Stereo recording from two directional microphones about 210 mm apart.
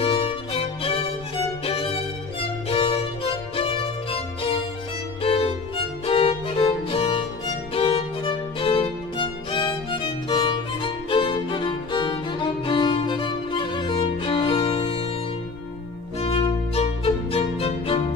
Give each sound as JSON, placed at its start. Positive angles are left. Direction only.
{"t": 0.0, "sound": "music", "side_deg": 25}
{"t": 1.6, "sound": "violin", "side_deg": 25}
{"t": 16.2, "sound": "music", "side_deg": 25}